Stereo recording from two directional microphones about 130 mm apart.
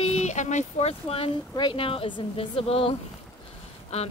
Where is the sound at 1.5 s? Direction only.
35° left (ahead or behind).